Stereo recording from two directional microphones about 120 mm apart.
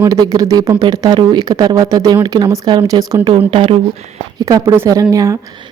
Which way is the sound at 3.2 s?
40° right (ahead or behind).